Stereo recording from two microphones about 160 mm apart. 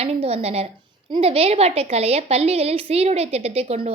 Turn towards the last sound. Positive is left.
turn(degrees=-40)  # may be behind; listen again after turning